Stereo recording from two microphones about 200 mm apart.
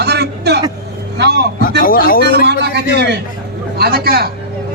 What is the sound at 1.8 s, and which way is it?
Speech, 45° left (ahead or behind).